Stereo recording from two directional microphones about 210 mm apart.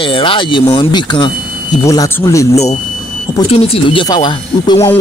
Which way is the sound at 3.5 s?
30° left (ahead or behind).